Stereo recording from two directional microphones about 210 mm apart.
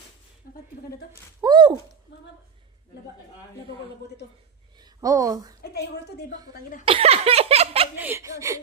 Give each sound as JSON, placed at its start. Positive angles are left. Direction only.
{"t": 1.4, "sound": "a sound", "side_deg": -20}
{"t": 4.8, "sound": "a woman's voice", "side_deg": -15}
{"t": 5.6, "sound": "a woman's voice", "side_deg": 50}
{"t": 6.8, "sound": "laughter", "side_deg": -25}
{"t": 7.9, "sound": "speech", "side_deg": -10}